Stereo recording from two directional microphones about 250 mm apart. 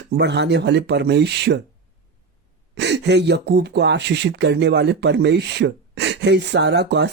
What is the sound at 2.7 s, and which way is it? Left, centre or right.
Speech, right.